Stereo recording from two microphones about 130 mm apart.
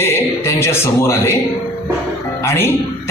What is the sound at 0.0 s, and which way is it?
A man's voice, 20° left (ahead or behind).